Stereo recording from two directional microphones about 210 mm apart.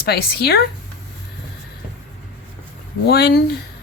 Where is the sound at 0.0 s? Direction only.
50° left (ahead or behind).